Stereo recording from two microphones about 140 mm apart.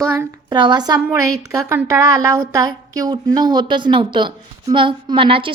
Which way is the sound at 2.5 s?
25° right (ahead or behind).